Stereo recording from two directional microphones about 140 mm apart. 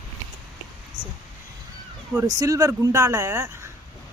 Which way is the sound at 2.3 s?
25° right (ahead or behind).